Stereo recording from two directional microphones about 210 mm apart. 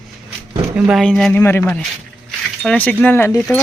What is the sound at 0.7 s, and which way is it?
Speech, centre (ahead or behind).